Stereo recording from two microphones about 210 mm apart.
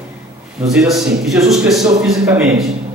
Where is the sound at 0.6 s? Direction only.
Centre (ahead or behind).